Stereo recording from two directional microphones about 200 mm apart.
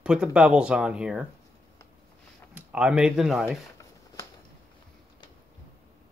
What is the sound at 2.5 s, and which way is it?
Speech, 5° right (ahead or behind).